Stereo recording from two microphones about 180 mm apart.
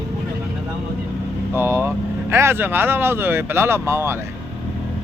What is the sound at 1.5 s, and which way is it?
A man's voice, 15° right (ahead or behind).